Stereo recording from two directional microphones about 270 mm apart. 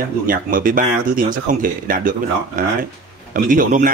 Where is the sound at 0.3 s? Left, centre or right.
Right.